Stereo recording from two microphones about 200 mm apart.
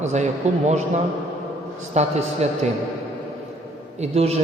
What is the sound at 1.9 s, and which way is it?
Speech, 35° right (ahead or behind).